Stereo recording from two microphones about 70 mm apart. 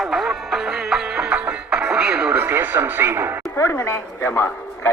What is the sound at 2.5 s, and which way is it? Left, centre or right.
Speech, right.